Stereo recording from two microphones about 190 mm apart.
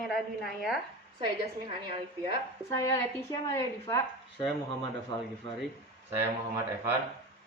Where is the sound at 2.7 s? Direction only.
15° left (ahead or behind).